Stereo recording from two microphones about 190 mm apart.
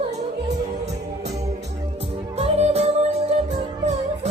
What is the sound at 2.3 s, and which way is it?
Music, 35° right (ahead or behind).